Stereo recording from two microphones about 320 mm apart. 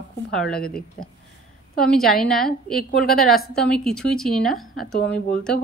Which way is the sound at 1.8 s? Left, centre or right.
Centre.